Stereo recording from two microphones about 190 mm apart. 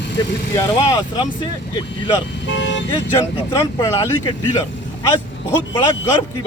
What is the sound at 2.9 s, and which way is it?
Speech, 20° left (ahead or behind).